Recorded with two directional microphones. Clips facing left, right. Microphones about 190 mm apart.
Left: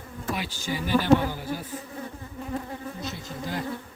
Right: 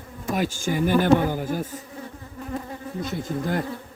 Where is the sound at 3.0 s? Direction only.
50° right (ahead or behind).